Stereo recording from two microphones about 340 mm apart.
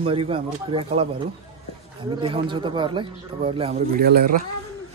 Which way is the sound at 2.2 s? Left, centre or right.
Centre.